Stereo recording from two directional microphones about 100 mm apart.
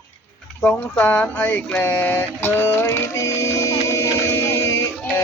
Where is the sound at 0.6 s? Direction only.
15° left (ahead or behind); by 4.9 s 30° left (ahead or behind).